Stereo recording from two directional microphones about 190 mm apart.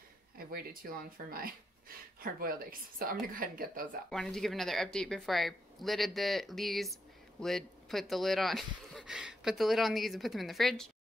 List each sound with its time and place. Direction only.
0.5 s a woman's voice: 50° right (ahead or behind)
4.1 s speech: 5° left (ahead or behind)